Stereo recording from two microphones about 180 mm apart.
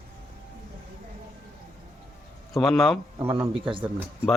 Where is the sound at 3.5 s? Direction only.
30° right (ahead or behind).